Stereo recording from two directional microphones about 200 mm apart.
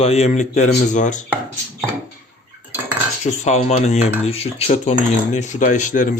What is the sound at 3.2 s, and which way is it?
Speech, 35° left (ahead or behind).